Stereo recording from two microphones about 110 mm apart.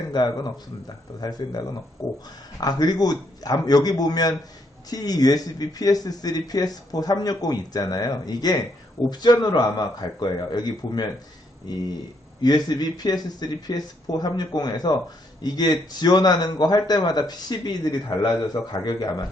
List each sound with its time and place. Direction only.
0.1 s speech: 40° left (ahead or behind)